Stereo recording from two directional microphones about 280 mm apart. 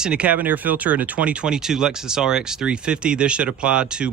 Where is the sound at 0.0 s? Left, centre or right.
Centre.